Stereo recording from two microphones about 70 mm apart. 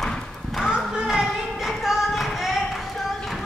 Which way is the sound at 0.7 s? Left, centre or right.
Centre.